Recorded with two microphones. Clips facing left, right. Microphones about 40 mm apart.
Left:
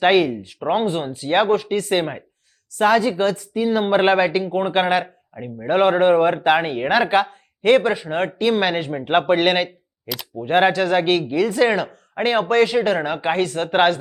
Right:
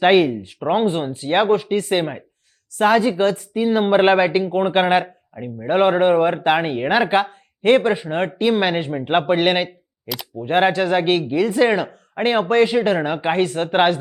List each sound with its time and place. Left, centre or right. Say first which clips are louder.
0.0 s speech: right 2 dB; centre
5.3 s a man's voice: even; centre